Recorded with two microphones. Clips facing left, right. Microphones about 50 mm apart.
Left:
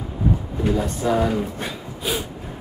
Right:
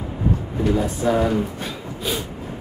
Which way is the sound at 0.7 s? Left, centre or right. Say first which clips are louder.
Right 1 dB; centre.